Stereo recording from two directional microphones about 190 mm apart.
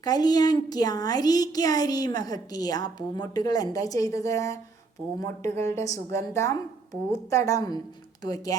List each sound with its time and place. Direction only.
0.0 s a woman's voice: 20° left (ahead or behind)